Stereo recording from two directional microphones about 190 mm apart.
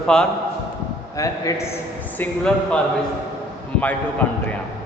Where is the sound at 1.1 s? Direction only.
15° left (ahead or behind).